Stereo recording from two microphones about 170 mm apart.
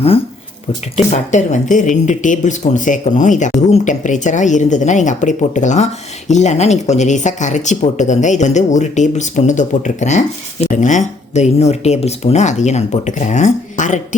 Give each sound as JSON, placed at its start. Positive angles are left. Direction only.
{"t": 1.1, "sound": "speech", "side_deg": 45}